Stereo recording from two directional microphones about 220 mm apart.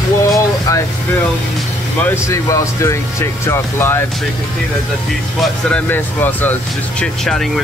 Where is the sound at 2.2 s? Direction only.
15° left (ahead or behind).